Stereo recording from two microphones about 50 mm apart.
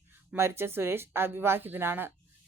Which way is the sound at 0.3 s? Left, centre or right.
Right.